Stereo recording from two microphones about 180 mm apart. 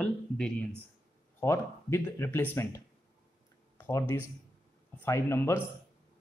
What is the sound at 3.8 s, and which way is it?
Speech, 15° left (ahead or behind).